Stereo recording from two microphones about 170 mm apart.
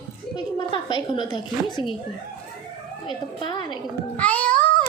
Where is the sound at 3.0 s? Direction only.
30° left (ahead or behind).